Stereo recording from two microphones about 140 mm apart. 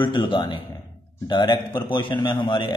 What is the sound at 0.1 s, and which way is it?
A man's voice, 30° left (ahead or behind).